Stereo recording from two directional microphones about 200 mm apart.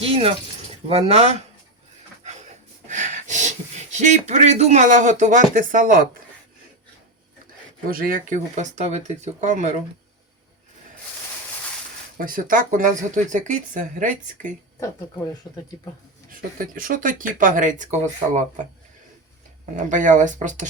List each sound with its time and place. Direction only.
0.0 s speech: 30° right (ahead or behind)
2.2 s a sound: 35° right (ahead or behind)
7.9 s speech: 45° right (ahead or behind)
12.1 s speech: 45° right (ahead or behind)
15.5 s speech: centre (ahead or behind)
16.3 s speech: 45° right (ahead or behind)
19.7 s speech: 40° right (ahead or behind)